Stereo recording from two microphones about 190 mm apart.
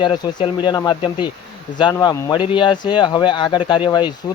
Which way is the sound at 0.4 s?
25° left (ahead or behind).